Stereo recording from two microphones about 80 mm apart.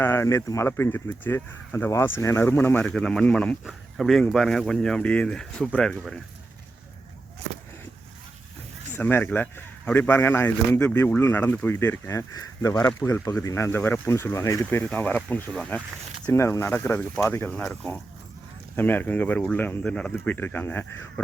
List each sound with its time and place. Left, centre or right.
0.0 s speech: left
0.9 s a man's voice: left
2.8 s speech: centre
3.9 s speech: centre
9.0 s a man's voice: left
16.3 s a man's voice: left; by 20.1 s centre
20.1 s a man's voice: left